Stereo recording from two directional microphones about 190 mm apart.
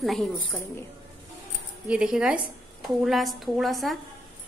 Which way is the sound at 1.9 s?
5° right (ahead or behind).